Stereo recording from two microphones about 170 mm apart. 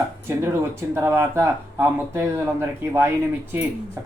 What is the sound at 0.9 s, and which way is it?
Speech, 15° right (ahead or behind).